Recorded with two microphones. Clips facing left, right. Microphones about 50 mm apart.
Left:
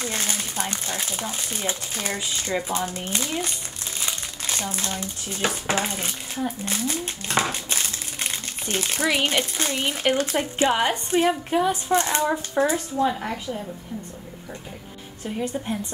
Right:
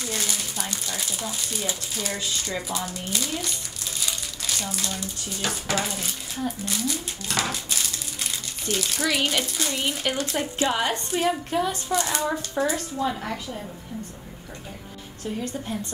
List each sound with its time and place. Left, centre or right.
0.0 s speech: left
6.6 s crumpling: left
9.1 s a woman's voice: left
11.9 s speech: left
12.7 s a woman's voice: centre
15.2 s a woman's voice: centre